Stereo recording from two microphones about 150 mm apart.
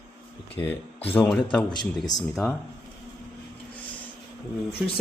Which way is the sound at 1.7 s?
30° left (ahead or behind).